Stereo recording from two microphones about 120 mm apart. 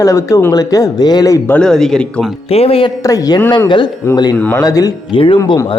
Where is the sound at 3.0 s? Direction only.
30° left (ahead or behind).